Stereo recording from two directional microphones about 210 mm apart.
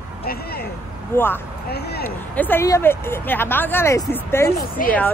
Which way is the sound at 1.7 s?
50° left (ahead or behind).